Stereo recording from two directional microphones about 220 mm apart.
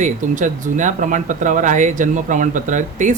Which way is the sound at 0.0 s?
35° right (ahead or behind).